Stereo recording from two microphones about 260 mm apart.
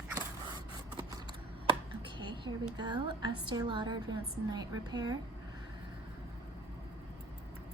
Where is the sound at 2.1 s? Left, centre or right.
Centre.